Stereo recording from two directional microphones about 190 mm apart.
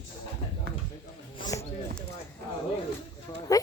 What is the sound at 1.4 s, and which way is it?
Basketball bounce, 20° left (ahead or behind).